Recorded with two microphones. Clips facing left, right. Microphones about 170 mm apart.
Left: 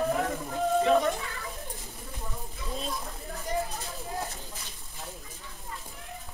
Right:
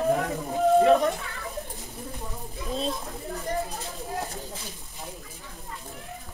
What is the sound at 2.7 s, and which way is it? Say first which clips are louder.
Children playing: right 6 dB; 25° right (ahead or behind).